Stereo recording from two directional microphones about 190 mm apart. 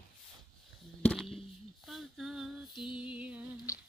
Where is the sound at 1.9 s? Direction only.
Centre (ahead or behind).